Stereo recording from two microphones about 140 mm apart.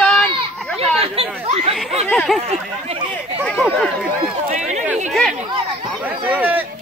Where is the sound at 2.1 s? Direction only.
Centre (ahead or behind).